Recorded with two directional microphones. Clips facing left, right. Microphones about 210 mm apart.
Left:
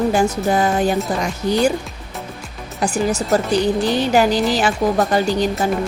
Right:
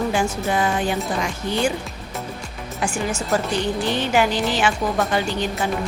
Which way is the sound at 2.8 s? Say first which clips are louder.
Left 6 dB; 40° left (ahead or behind).